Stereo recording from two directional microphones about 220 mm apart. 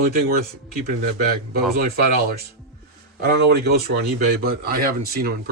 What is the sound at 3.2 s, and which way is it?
Speech, 45° right (ahead or behind).